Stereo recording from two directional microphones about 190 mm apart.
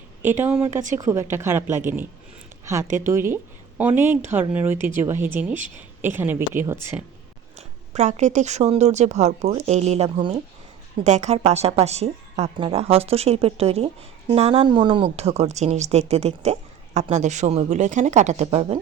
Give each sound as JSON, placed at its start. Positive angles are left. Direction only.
{"t": 0.2, "sound": "speech", "side_deg": -10}
{"t": 3.1, "sound": "speech", "side_deg": -15}
{"t": 7.5, "sound": "a woman's voice", "side_deg": -35}